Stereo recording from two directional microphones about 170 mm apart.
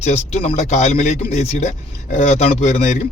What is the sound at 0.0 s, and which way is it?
Speech, 40° left (ahead or behind).